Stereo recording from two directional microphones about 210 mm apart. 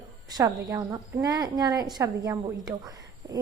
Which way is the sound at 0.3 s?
15° right (ahead or behind).